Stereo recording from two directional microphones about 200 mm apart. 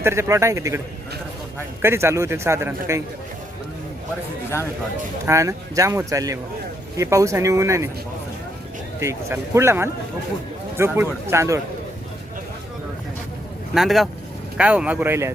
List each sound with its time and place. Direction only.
0.0 s speech: 15° right (ahead or behind)
1.8 s speech: 10° right (ahead or behind)
5.2 s speech: 15° right (ahead or behind)
9.0 s speech: 15° right (ahead or behind)
13.7 s speech: centre (ahead or behind)